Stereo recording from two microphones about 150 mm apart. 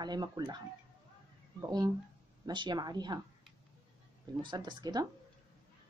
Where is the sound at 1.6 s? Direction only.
25° right (ahead or behind).